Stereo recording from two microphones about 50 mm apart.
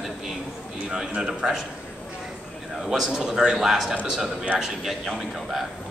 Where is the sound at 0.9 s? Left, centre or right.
Centre.